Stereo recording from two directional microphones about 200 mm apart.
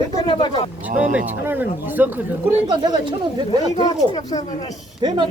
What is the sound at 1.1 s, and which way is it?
Speech, 10° right (ahead or behind).